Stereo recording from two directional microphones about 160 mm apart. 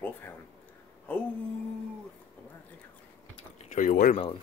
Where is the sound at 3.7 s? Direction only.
60° left (ahead or behind).